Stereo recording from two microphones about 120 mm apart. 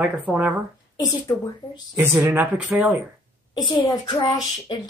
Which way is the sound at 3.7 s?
40° left (ahead or behind).